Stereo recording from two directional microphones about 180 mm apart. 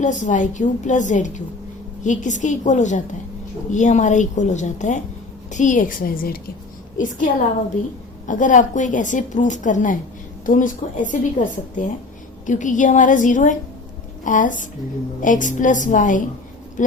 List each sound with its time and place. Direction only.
0.0 s a woman's voice: 40° left (ahead or behind)